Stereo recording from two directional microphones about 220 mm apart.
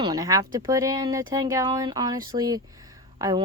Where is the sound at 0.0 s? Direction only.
15° right (ahead or behind).